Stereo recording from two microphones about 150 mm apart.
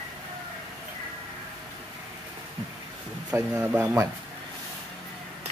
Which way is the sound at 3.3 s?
15° right (ahead or behind).